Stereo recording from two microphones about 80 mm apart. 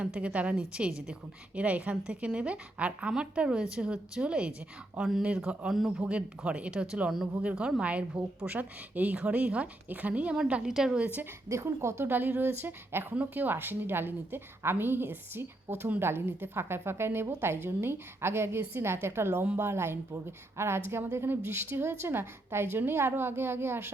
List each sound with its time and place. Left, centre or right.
0.0 s a woman's voice: centre
11.4 s a woman's voice: right